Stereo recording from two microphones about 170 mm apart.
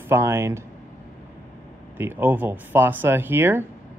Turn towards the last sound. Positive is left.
turn(degrees=-15)  # may be behind; listen again after turning